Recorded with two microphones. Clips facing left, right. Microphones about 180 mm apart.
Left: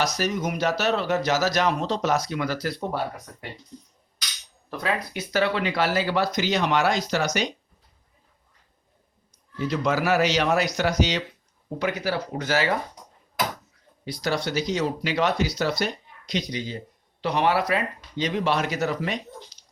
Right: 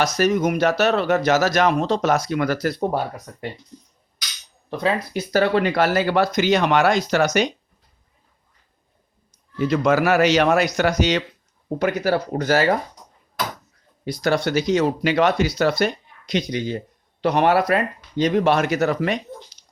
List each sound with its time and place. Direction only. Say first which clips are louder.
0.0 s speech: right 7 dB; 55° right (ahead or behind)
4.7 s speech: right 6 dB; 30° right (ahead or behind)
5.4 s speech: right 5 dB; 45° right (ahead or behind)
9.6 s speech: right 6 dB; 55° right (ahead or behind)
14.0 s speech: right 6 dB; 50° right (ahead or behind)